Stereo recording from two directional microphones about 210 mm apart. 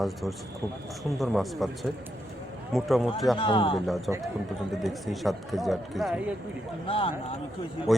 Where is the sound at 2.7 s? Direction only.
Centre (ahead or behind).